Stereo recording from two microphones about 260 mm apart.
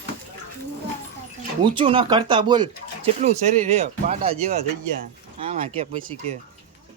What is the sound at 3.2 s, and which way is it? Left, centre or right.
Speech, right.